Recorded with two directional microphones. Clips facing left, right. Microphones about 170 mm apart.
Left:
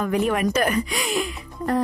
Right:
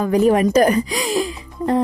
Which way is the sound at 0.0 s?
35° right (ahead or behind).